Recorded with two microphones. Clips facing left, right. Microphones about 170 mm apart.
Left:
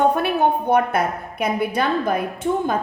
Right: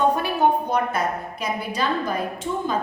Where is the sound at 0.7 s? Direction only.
60° left (ahead or behind).